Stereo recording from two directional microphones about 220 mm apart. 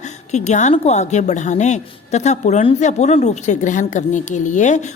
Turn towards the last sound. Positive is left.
turn(degrees=35)  # may be behind; listen again after turning